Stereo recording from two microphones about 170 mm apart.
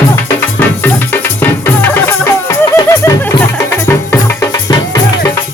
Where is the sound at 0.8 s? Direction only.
10° left (ahead or behind).